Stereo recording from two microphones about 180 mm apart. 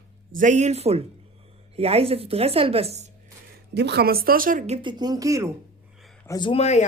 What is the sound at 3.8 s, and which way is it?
Speech, 65° right (ahead or behind).